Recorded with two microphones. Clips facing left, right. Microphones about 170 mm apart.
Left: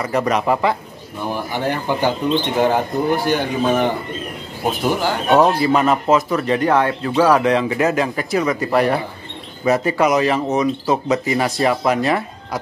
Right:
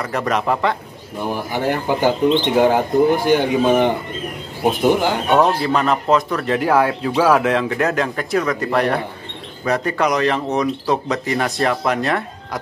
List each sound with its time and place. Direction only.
0.0 s speech: centre (ahead or behind)
1.5 s speech: 10° right (ahead or behind)
5.3 s speech: 5° left (ahead or behind)